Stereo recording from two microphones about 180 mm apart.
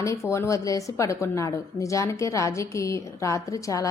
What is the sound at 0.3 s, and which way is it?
A woman's voice, 15° left (ahead or behind).